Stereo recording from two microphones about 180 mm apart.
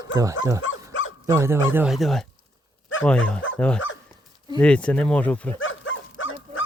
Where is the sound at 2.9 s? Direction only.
90° left.